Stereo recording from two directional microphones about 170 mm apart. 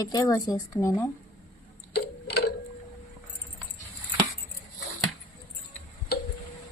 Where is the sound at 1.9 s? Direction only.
75° left (ahead or behind).